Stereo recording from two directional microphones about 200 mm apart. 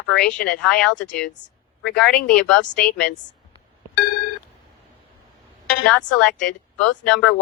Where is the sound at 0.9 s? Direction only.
65° left (ahead or behind).